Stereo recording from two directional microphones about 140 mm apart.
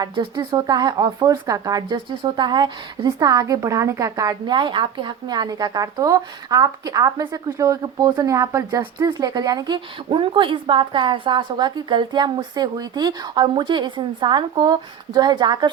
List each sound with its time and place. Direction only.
0.0 s a woman's voice: 30° right (ahead or behind)